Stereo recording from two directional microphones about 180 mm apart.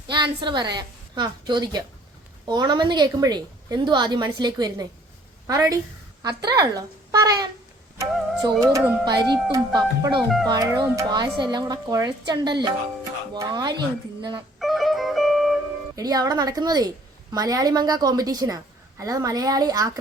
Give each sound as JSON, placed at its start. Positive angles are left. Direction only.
{"t": 0.1, "sound": "a woman's voice", "side_deg": -25}
{"t": 8.7, "sound": "a woman's voice", "side_deg": -20}
{"t": 10.2, "sound": "speech", "side_deg": 0}
{"t": 10.5, "sound": "a woman's voice", "side_deg": -20}
{"t": 14.6, "sound": "music", "side_deg": 0}
{"t": 16.0, "sound": "a woman's voice", "side_deg": -20}